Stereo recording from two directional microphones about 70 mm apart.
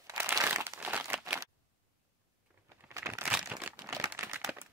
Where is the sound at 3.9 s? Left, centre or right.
Right.